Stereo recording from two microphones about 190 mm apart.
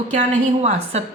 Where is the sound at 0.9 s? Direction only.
35° right (ahead or behind).